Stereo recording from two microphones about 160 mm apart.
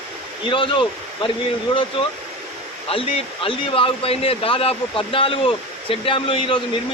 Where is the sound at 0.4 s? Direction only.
30° left (ahead or behind).